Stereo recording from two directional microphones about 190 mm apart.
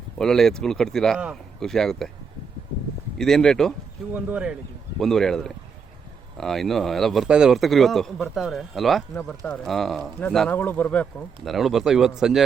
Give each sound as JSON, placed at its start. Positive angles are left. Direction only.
{"t": 0.2, "sound": "speech", "side_deg": 0}
{"t": 3.2, "sound": "speech", "side_deg": 5}
{"t": 4.1, "sound": "speech", "side_deg": -5}
{"t": 9.1, "sound": "speech", "side_deg": 10}